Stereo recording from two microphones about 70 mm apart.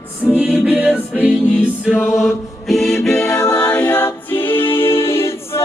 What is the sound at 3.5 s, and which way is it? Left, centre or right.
Music, left.